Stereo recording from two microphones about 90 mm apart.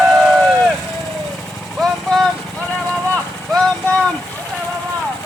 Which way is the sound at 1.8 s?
5° left (ahead or behind).